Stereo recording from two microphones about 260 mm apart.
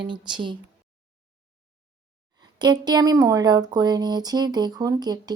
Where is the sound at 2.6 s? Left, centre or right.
Centre.